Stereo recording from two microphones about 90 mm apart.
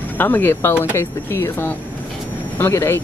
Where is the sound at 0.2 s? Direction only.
25° left (ahead or behind).